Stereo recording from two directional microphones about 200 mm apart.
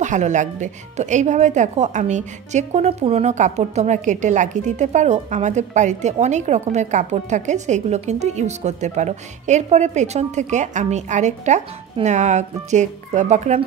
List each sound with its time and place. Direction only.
0.0 s speech: 35° right (ahead or behind)